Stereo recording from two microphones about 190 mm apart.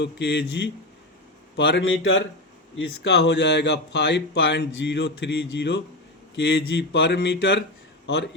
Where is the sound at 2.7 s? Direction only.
65° left (ahead or behind).